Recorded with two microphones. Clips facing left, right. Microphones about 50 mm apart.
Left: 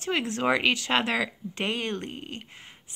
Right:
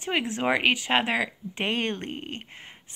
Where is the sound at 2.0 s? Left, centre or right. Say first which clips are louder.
Right 2 dB; right.